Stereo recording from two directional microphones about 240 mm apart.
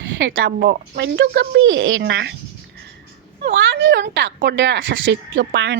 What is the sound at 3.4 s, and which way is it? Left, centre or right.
A woman's voice, right.